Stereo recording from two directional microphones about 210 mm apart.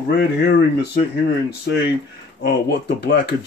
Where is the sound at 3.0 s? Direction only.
55° left (ahead or behind).